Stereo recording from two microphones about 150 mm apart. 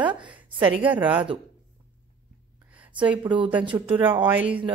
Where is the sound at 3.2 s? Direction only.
30° right (ahead or behind).